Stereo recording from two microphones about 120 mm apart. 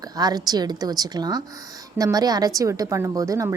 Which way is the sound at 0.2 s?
35° right (ahead or behind).